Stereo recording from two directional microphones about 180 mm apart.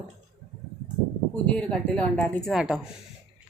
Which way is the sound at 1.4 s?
5° left (ahead or behind).